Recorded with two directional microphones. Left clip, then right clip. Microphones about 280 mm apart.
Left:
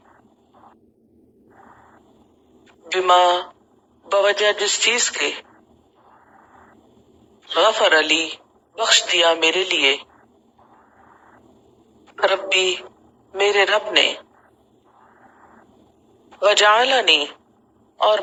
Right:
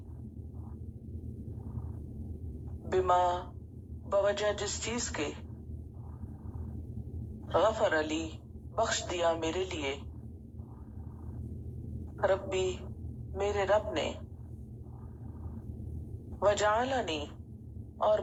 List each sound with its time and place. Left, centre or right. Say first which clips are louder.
2.9 s a man's voice: left 12 dB; left
7.4 s a man's voice: left 11 dB; left
12.1 s a woman's voice: left 12 dB; left
16.3 s a man's voice: left 13 dB; left
17.9 s vehicle: left 11 dB; left